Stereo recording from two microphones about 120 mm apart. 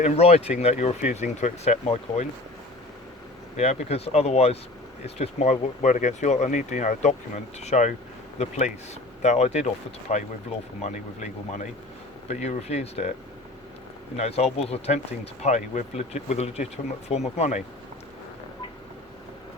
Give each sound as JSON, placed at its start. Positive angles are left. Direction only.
{"t": 0.0, "sound": "speech", "side_deg": 60}
{"t": 3.6, "sound": "speech", "side_deg": 60}
{"t": 12.3, "sound": "speech", "side_deg": 70}
{"t": 14.2, "sound": "speech", "side_deg": 60}